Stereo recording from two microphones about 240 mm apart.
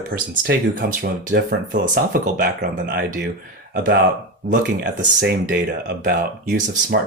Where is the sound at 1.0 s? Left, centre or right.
Right.